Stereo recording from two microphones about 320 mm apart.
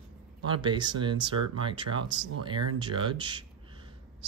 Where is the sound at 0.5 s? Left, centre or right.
Centre.